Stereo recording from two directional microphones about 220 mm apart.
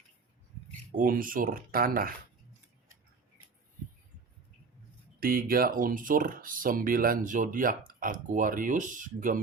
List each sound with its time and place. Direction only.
0.9 s speech: 40° right (ahead or behind)
5.2 s speech: 40° right (ahead or behind)